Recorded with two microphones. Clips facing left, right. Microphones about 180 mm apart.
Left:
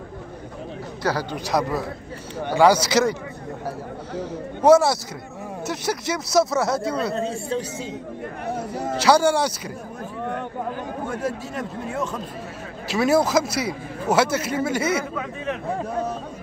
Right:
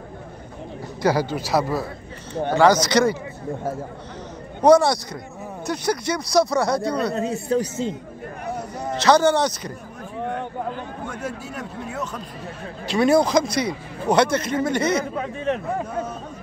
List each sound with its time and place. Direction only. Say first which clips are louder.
1.0 s a man's voice: right 4 dB; 10° right (ahead or behind)
2.3 s speech: right 1 dB; 10° left (ahead or behind)
4.6 s a man's voice: even; 5° left (ahead or behind)
7.3 s speech: right 4 dB; 40° right (ahead or behind)
8.7 s speech: right 1 dB; 10° left (ahead or behind)
12.8 s a man's voice: right 2 dB; 5° left (ahead or behind)
15.1 s speech: right 4 dB; 35° right (ahead or behind)